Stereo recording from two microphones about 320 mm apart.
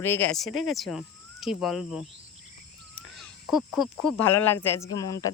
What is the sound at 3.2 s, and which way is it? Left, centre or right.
Speech, centre.